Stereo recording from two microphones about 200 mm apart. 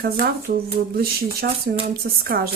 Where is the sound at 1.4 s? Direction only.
50° right (ahead or behind).